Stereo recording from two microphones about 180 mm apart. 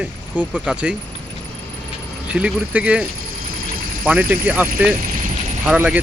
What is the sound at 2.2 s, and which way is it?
Speech, 5° right (ahead or behind).